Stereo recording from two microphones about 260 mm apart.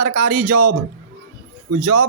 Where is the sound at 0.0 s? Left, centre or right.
Right.